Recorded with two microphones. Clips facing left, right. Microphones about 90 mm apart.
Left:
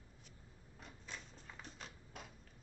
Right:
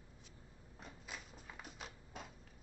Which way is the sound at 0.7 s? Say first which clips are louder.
Right 1 dB; 5° right (ahead or behind).